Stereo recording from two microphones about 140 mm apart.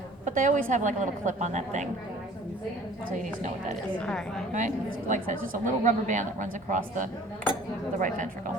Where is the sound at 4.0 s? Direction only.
5° left (ahead or behind).